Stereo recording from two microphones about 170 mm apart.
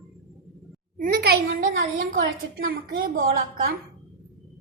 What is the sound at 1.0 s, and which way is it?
A woman's voice, 65° right (ahead or behind).